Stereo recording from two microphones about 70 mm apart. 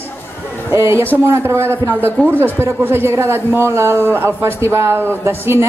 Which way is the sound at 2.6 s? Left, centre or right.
Right.